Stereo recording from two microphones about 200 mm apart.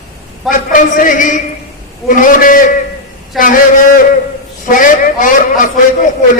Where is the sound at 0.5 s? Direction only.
40° left (ahead or behind).